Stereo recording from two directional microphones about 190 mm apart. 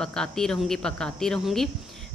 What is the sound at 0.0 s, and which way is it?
Speech, 5° left (ahead or behind).